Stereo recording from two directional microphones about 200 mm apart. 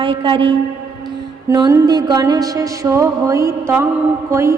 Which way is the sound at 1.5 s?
15° right (ahead or behind).